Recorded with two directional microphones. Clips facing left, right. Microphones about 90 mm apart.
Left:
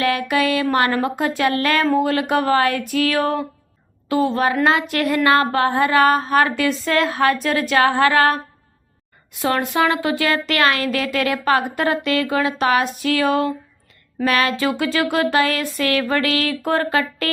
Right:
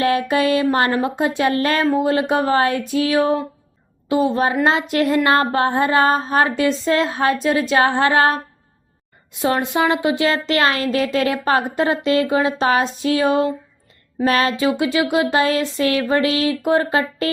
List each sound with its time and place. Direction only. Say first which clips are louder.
0.0 s speech: right 2 dB; 30° right (ahead or behind)